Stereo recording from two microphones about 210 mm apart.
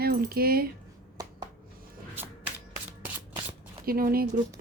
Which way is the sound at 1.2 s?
15° right (ahead or behind).